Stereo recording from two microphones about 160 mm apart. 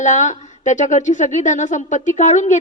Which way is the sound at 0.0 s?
50° left (ahead or behind).